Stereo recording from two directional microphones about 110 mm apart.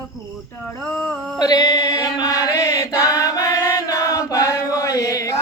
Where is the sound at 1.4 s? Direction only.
35° left (ahead or behind).